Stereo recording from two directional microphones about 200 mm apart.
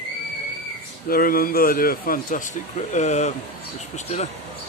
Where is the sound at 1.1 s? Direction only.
45° left (ahead or behind).